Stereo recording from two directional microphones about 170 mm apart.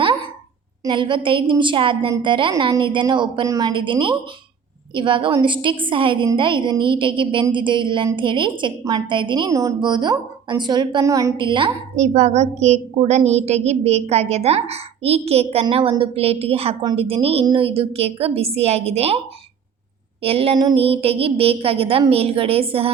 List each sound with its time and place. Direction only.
0.9 s a woman's voice: 30° right (ahead or behind)
11.9 s a woman's voice: 40° right (ahead or behind)
20.2 s a woman's voice: 35° right (ahead or behind)